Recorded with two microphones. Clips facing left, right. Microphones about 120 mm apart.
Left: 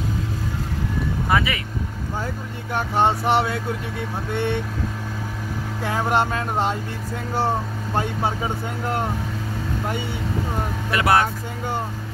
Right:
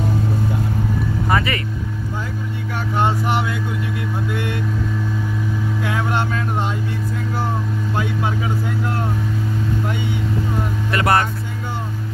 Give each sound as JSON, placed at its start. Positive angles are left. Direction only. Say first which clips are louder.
{"t": 1.3, "sound": "speech", "louder": "right 1 dB", "side_deg": 0}
{"t": 3.0, "sound": "a sound", "louder": "left 1 dB", "side_deg": 30}
{"t": 5.9, "sound": "speech", "louder": "left 3 dB", "side_deg": 35}
{"t": 10.9, "sound": "speech", "louder": "right 1 dB", "side_deg": 5}